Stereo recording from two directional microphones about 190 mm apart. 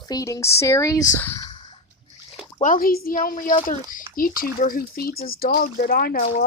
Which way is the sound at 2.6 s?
50° left (ahead or behind).